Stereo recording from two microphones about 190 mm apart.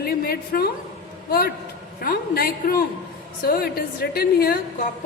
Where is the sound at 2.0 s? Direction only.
50° left (ahead or behind).